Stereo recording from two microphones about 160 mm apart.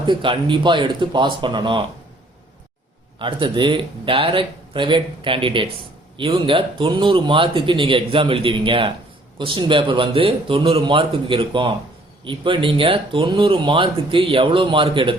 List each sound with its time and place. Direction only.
0.0 s speech: 30° right (ahead or behind)
3.2 s speech: 30° right (ahead or behind)